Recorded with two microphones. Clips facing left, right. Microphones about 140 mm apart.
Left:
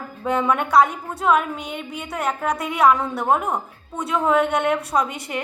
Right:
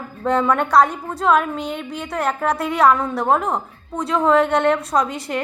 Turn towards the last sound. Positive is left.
turn(degrees=5)  # may be behind; listen again after turning